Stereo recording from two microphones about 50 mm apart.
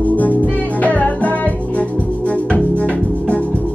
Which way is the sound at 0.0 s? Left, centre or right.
Left.